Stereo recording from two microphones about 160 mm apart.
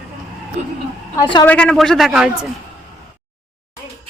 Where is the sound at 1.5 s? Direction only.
5° left (ahead or behind).